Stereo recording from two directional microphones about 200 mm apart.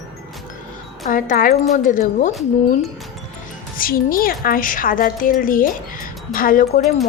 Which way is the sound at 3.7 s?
45° left (ahead or behind).